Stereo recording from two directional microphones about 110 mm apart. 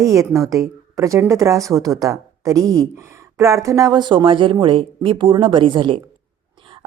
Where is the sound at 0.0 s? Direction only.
30° right (ahead or behind).